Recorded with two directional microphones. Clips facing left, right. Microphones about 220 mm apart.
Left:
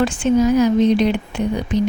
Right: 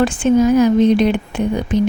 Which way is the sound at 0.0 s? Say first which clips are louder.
Right 2 dB; 50° right (ahead or behind).